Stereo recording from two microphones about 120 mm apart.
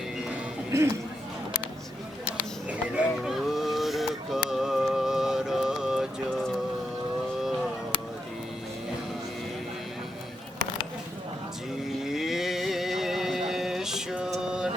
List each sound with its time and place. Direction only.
0.7 s speech: 20° right (ahead or behind)
2.6 s a sound: 10° right (ahead or behind)
4.4 s music: 5° right (ahead or behind)
11.9 s music: 5° right (ahead or behind)